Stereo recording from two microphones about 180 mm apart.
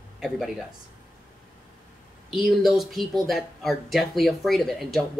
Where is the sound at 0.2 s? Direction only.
Centre (ahead or behind).